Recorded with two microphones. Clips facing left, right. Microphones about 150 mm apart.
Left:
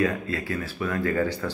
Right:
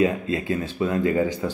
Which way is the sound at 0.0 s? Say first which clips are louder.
Right 4 dB; 20° right (ahead or behind).